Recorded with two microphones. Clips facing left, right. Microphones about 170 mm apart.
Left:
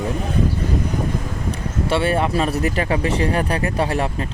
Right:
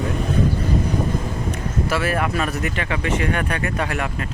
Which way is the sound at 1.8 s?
30° left (ahead or behind).